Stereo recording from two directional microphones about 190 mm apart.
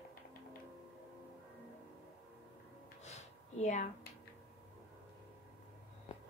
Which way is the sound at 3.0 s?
35° left (ahead or behind).